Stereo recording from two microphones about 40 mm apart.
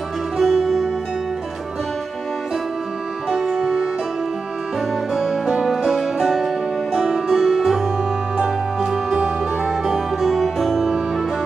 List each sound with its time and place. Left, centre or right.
0.4 s music: centre
3.3 s music: centre
5.1 s music: centre
9.7 s music: centre